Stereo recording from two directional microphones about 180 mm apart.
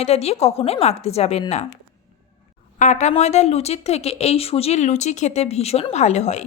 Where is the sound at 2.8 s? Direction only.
40° left (ahead or behind).